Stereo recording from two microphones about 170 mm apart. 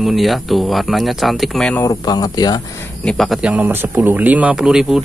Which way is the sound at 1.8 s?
25° left (ahead or behind).